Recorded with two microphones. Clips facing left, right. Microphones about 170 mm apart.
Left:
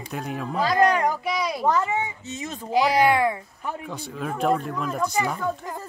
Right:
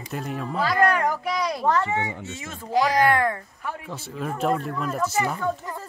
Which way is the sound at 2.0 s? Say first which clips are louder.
Right 1 dB; 75° right (ahead or behind).